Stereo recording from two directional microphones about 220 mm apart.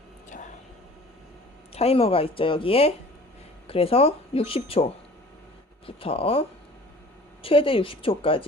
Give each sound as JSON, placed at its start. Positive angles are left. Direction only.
{"t": 1.7, "sound": "speech", "side_deg": 25}
{"t": 7.4, "sound": "speech", "side_deg": 25}